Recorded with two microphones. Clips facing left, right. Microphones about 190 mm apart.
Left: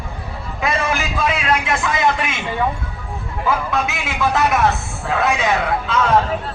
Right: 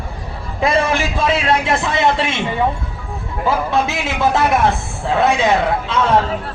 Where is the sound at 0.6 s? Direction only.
30° right (ahead or behind).